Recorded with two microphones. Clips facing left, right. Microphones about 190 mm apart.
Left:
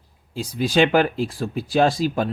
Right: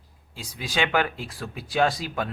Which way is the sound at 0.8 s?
30° left (ahead or behind).